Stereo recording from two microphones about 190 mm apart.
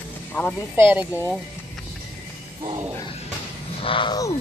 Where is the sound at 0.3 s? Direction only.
5° left (ahead or behind).